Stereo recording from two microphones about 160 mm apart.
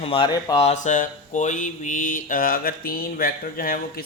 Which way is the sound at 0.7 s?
50° left (ahead or behind).